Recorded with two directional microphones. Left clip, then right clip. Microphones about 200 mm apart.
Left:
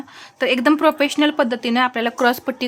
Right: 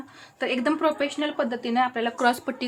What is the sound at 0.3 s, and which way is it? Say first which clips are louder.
A woman's voice: left 8 dB; 35° left (ahead or behind).